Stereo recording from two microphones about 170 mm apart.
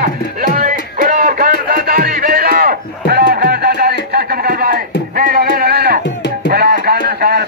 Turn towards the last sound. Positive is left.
turn(degrees=-65)  # may be behind; listen again after turning